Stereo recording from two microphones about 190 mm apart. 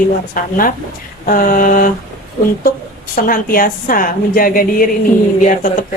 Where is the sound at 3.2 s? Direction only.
50° left (ahead or behind).